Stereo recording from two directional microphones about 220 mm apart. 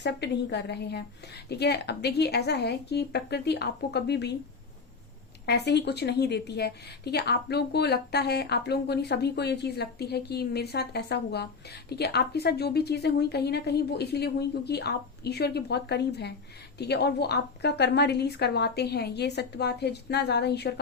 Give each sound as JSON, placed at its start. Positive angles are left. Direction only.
{"t": 0.0, "sound": "a woman's voice", "side_deg": 50}
{"t": 5.5, "sound": "a woman's voice", "side_deg": 50}